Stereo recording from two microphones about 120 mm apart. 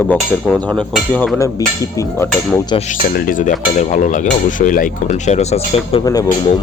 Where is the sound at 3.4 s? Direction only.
90° left; by 6.0 s 65° left (ahead or behind).